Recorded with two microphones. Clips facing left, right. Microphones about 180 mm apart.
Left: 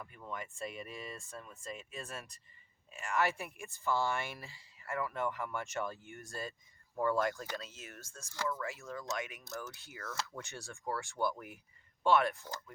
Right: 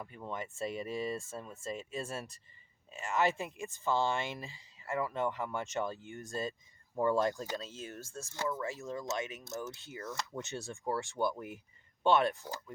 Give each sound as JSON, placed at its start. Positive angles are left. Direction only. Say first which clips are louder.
{"t": 0.0, "sound": "speech", "louder": "right 3 dB", "side_deg": -25}